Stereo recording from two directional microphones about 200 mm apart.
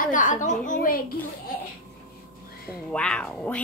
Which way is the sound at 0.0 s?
40° left (ahead or behind).